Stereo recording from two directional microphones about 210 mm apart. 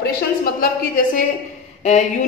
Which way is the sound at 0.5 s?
45° left (ahead or behind).